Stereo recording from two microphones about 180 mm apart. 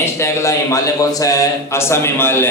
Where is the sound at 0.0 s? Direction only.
15° left (ahead or behind).